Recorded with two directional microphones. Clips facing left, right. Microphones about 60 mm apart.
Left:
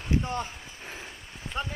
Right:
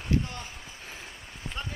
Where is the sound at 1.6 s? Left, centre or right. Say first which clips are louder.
Left 6 dB; left.